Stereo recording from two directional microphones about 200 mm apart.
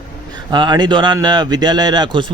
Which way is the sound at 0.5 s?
20° right (ahead or behind).